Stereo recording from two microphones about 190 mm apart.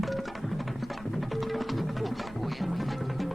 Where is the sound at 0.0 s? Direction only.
Centre (ahead or behind).